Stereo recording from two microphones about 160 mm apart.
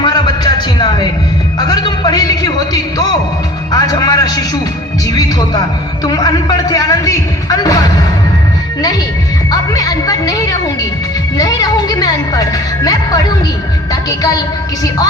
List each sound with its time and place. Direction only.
0.0 s a sound: 25° left (ahead or behind)
1.5 s music: 25° left (ahead or behind)
3.7 s a sound: 25° left (ahead or behind)
6.1 s a man's voice: 25° left (ahead or behind)
9.5 s music: 20° left (ahead or behind)
13.9 s a woman's voice: 20° left (ahead or behind)